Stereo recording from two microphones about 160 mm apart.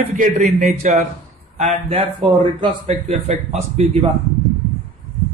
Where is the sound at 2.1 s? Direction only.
30° right (ahead or behind).